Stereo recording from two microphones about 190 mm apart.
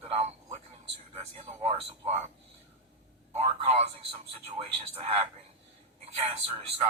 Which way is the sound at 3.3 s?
35° right (ahead or behind).